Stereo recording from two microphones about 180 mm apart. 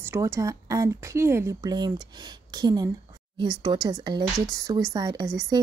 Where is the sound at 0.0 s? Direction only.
15° right (ahead or behind).